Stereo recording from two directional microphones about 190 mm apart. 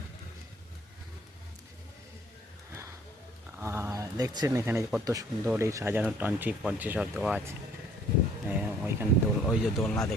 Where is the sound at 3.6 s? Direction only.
15° right (ahead or behind).